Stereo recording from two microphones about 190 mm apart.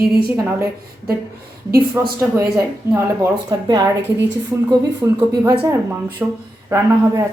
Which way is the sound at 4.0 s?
65° right (ahead or behind).